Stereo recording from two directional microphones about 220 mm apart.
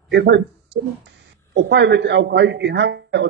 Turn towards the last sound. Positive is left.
turn(degrees=-50)  # may be behind; listen again after turning